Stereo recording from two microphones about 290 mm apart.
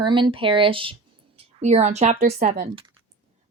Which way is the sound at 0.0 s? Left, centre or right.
Centre.